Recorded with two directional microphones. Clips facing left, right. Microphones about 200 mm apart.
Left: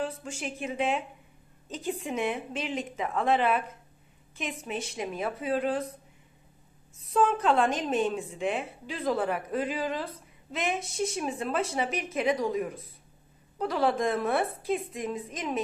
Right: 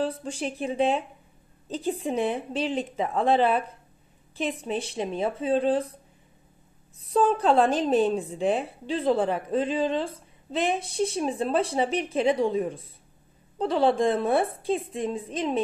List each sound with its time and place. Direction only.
0.0 s a woman's voice: 35° right (ahead or behind)
7.0 s a woman's voice: 35° right (ahead or behind)